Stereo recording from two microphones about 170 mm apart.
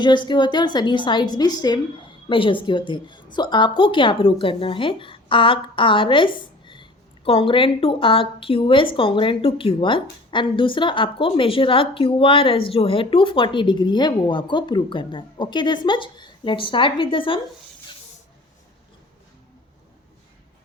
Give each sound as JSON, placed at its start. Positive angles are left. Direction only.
{"t": 0.0, "sound": "a woman's voice", "side_deg": 25}